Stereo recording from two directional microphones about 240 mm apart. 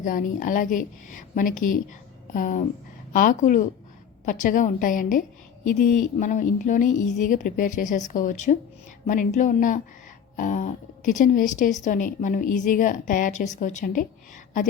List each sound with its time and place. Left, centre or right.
0.0 s speech: left